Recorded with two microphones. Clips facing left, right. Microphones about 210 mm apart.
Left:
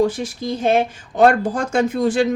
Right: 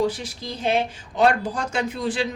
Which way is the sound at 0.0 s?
50° left (ahead or behind).